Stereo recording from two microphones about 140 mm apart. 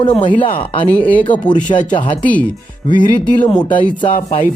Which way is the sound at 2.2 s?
10° left (ahead or behind).